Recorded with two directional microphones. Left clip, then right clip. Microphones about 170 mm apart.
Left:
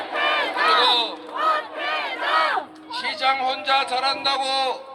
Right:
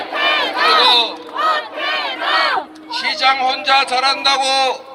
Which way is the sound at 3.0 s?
20° left (ahead or behind).